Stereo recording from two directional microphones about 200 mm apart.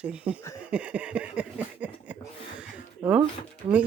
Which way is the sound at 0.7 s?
5° right (ahead or behind).